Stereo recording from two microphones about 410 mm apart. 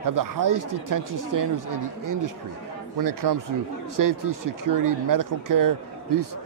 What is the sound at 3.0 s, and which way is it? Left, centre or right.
A man's voice, right.